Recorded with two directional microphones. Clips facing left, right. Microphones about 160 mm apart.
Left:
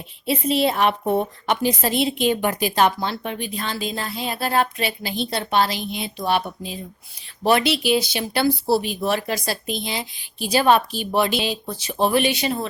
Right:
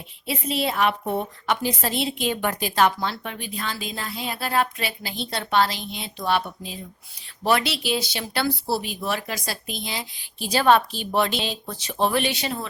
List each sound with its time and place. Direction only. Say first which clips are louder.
0.3 s a woman's voice: left 6 dB; 25° left (ahead or behind)